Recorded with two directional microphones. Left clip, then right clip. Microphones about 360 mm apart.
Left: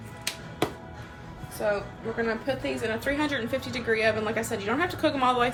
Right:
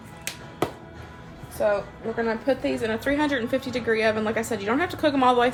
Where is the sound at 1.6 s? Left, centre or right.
Right.